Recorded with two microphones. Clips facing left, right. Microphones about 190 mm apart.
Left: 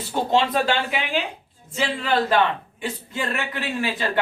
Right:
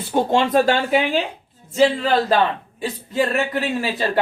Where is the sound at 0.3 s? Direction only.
45° right (ahead or behind).